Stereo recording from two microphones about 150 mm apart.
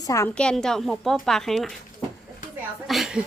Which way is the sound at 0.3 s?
5° left (ahead or behind).